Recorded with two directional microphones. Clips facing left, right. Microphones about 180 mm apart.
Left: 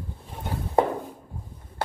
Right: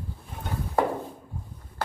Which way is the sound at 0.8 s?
25° left (ahead or behind).